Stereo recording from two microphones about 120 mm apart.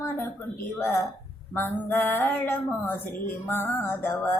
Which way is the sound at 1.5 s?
15° left (ahead or behind).